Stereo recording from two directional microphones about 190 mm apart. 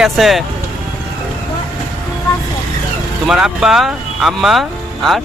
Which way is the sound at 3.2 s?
5° right (ahead or behind).